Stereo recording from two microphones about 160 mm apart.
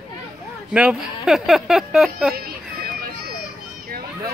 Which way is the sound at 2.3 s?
70° right (ahead or behind).